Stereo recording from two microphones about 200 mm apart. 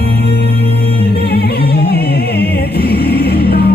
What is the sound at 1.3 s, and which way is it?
Music, 50° left (ahead or behind).